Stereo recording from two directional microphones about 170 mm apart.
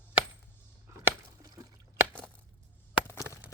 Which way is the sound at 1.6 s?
20° right (ahead or behind).